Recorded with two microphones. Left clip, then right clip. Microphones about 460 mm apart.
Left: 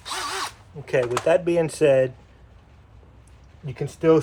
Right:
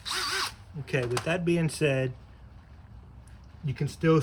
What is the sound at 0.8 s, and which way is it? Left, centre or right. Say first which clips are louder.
Speech: left 9 dB; centre.